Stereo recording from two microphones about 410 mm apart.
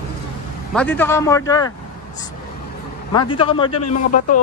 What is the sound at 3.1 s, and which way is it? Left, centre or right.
Speech, centre.